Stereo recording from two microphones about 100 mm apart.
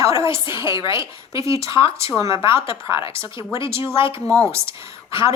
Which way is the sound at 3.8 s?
25° right (ahead or behind).